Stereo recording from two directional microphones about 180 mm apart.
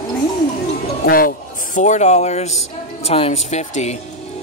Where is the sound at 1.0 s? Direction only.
55° left (ahead or behind).